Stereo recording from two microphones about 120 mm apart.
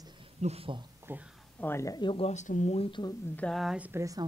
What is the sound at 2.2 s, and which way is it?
Speech, 85° left.